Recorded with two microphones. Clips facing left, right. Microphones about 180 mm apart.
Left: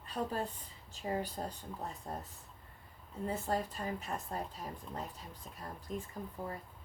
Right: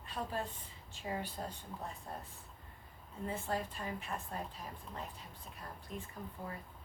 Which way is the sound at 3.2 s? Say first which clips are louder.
Left 3 dB; 40° left (ahead or behind).